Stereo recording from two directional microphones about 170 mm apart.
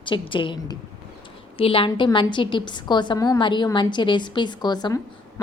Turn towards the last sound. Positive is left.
turn(degrees=25)  # may be behind; listen again after turning